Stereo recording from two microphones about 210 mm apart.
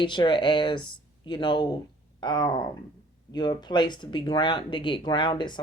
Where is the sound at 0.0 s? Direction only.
25° left (ahead or behind).